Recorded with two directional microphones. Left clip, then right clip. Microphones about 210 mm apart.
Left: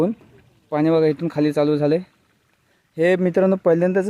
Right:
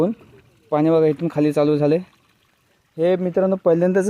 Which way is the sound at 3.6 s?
Centre (ahead or behind).